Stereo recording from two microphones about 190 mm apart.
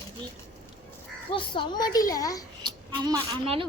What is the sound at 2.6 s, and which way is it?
A woman's voice, 20° right (ahead or behind).